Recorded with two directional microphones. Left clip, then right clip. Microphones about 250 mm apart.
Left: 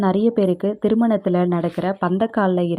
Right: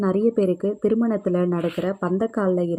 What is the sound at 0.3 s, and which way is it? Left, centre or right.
Speech, centre.